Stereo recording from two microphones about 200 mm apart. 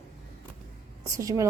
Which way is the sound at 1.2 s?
15° right (ahead or behind).